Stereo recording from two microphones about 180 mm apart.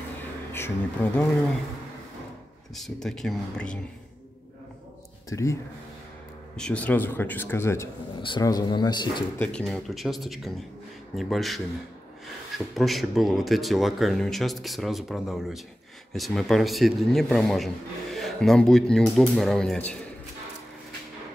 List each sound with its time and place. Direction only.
1.0 s a man's voice: 10° left (ahead or behind)
2.7 s speech: centre (ahead or behind)
5.3 s a man's voice: 15° left (ahead or behind)
6.5 s a man's voice: 5° left (ahead or behind); by 9.2 s 25° left (ahead or behind)
9.4 s speech: 5° left (ahead or behind)